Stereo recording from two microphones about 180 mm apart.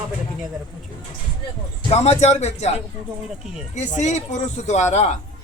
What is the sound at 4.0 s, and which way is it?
Speech, 40° left (ahead or behind).